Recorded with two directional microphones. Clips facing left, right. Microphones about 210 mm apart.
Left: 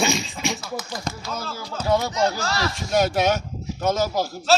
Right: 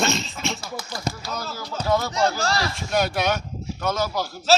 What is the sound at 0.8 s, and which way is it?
Speech, 30° right (ahead or behind).